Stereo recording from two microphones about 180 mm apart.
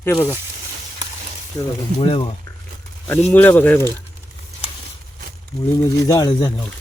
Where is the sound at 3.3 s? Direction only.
10° left (ahead or behind).